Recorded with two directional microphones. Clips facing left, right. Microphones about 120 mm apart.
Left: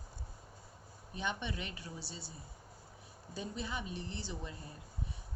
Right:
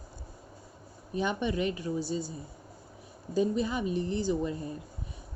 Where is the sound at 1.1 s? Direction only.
50° right (ahead or behind).